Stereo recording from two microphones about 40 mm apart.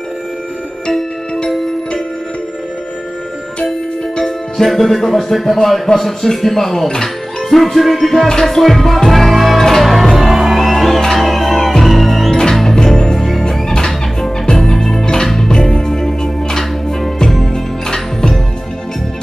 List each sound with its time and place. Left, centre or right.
4.2 s speech: centre
7.4 s music: centre
12.3 s music: centre
17.5 s music: centre